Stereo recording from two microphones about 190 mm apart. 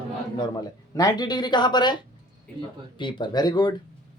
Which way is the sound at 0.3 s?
20° left (ahead or behind).